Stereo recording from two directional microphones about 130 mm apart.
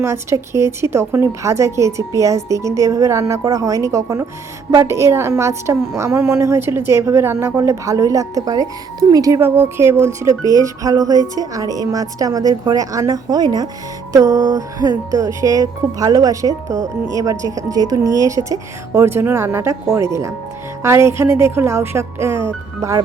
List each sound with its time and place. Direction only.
0.0 s a woman's voice: 20° right (ahead or behind)